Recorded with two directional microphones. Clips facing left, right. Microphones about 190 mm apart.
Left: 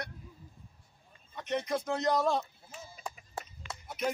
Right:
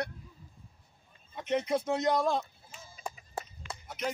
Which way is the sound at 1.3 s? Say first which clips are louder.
Right 3 dB; 10° right (ahead or behind).